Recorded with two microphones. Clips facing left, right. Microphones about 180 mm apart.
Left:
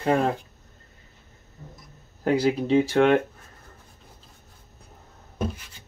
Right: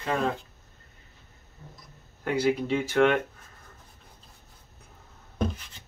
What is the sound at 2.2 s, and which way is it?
Speech, 35° left (ahead or behind).